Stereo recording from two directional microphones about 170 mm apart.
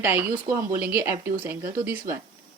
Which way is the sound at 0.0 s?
10° right (ahead or behind).